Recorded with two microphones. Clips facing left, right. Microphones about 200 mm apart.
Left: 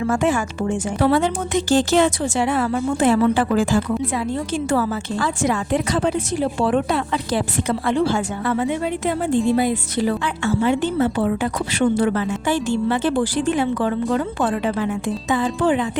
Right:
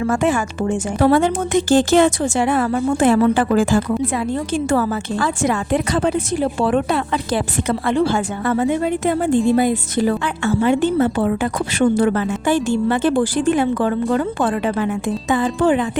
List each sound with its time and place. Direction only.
0.1 s speech: 55° right (ahead or behind)